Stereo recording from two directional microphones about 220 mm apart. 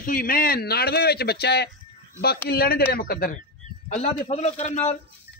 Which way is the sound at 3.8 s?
30° left (ahead or behind).